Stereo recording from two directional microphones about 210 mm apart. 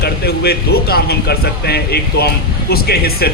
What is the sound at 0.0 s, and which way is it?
A man's voice, 50° left (ahead or behind).